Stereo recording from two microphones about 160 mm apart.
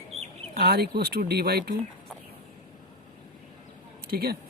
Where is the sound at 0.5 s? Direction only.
85° right.